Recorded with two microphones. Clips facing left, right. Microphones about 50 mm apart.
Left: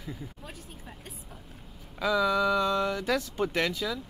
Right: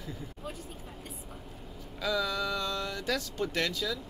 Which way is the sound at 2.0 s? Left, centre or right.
Centre.